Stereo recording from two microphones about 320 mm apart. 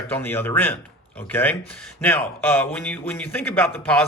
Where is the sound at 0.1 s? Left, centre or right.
Centre.